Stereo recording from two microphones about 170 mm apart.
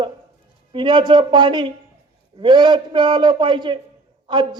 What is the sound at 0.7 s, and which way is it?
Speech, 30° right (ahead or behind).